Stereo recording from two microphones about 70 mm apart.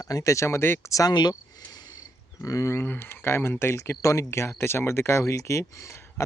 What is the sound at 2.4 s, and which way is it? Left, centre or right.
Speech, left.